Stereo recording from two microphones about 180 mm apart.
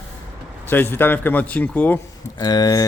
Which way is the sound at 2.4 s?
20° left (ahead or behind).